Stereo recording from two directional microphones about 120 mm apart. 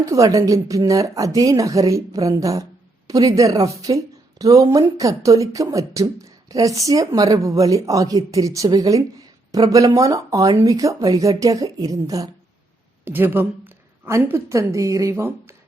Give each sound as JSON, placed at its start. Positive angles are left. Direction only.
{"t": 0.0, "sound": "speech", "side_deg": -25}
{"t": 13.1, "sound": "a woman's voice", "side_deg": -20}